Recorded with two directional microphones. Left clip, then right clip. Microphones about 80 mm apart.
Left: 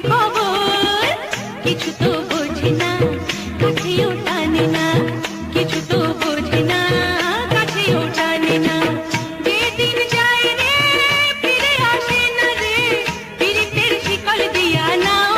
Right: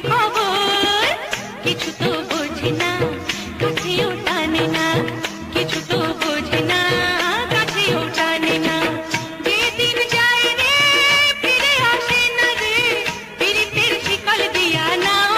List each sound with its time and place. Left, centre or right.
0.2 s music: right
0.6 s music: right
1.7 s music: right
3.9 s music: right
5.9 s music: right
8.6 s music: right
9.4 s music of bollywood: right; by 11.3 s centre
11.4 s music: right
12.1 s music of bollywood: right
14.6 s music: right